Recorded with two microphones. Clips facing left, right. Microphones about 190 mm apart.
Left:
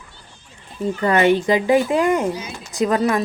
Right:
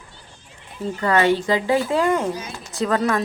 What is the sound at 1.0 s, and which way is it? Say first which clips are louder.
A woman's voice: left 2 dB; 20° left (ahead or behind).